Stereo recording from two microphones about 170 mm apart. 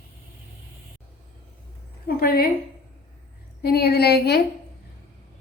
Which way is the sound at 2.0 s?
60° left (ahead or behind).